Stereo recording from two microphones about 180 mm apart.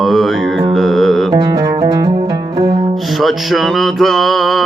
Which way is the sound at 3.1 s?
Centre (ahead or behind).